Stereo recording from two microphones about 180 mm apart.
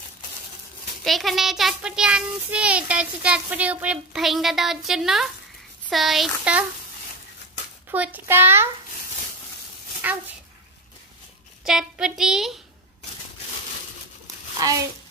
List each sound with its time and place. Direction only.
1.0 s a child's voice: centre (ahead or behind)
7.9 s a child's voice: 10° right (ahead or behind)
11.6 s a woman's voice: 5° right (ahead or behind)
14.2 s a sound: 20° right (ahead or behind)